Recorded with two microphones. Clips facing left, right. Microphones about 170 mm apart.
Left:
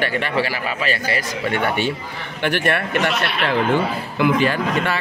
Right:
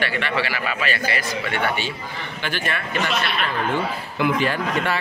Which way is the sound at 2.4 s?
65° left (ahead or behind).